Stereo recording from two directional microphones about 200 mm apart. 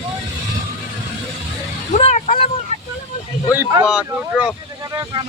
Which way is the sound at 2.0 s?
35° left (ahead or behind).